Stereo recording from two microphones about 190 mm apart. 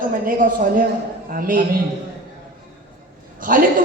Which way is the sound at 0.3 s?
45° right (ahead or behind).